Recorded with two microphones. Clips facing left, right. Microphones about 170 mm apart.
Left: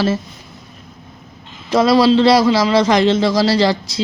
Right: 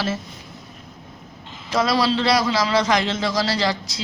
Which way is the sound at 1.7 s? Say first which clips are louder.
Left 8 dB; 25° left (ahead or behind).